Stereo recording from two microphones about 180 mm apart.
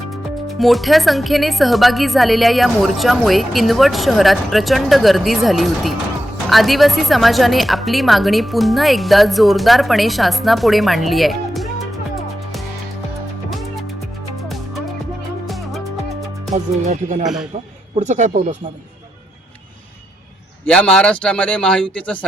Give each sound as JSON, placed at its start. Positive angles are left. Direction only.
{"t": 0.1, "sound": "speech", "side_deg": 0}
{"t": 14.4, "sound": "music", "side_deg": 0}
{"t": 16.5, "sound": "speech", "side_deg": -40}
{"t": 20.7, "sound": "speech", "side_deg": 5}